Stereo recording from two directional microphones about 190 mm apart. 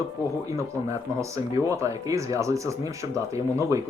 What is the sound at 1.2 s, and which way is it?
Speech, 15° right (ahead or behind).